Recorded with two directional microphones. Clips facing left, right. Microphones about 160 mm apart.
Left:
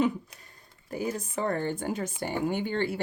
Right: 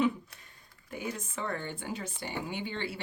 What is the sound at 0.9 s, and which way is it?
Speech, 35° left (ahead or behind).